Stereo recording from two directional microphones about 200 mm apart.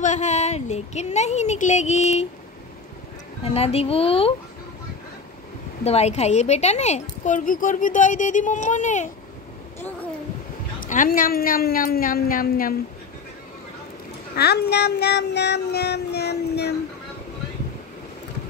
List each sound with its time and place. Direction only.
0.0 s a woman's voice: 35° left (ahead or behind)
3.4 s speech: 30° left (ahead or behind)
5.9 s a woman's voice: 30° left (ahead or behind)
10.8 s a woman's voice: 40° left (ahead or behind)
14.3 s child singing: 55° left (ahead or behind)